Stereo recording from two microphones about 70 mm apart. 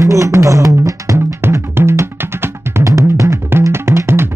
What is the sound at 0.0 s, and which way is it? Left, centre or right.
Music, right.